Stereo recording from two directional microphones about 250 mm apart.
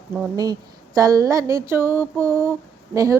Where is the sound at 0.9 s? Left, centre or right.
Centre.